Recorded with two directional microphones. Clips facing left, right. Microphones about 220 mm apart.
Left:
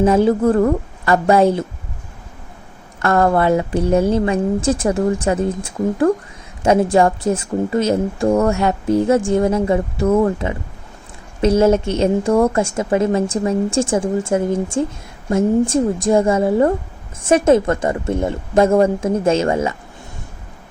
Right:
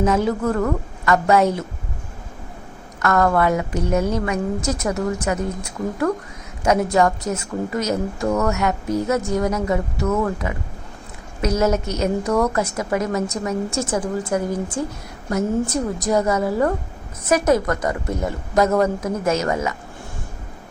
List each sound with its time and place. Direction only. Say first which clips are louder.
0.0 s a woman's voice: left 6 dB; 30° left (ahead or behind)
3.0 s a woman's voice: left 3 dB; 30° left (ahead or behind)
6.6 s a woman's voice: left 4 dB; 30° left (ahead or behind)